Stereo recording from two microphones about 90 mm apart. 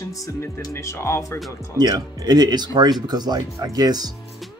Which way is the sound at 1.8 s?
45° right (ahead or behind).